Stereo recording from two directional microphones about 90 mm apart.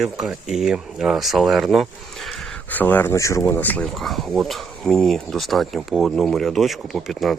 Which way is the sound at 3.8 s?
Centre (ahead or behind).